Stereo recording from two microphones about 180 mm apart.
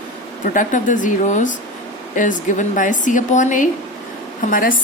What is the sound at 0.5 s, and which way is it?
A woman's voice, 45° left (ahead or behind).